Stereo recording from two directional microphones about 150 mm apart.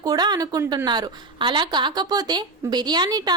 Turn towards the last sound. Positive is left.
turn(degrees=-25)  # may be behind; listen again after turning